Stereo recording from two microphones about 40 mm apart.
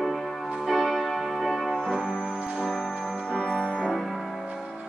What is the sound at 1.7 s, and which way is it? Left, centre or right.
Music, right.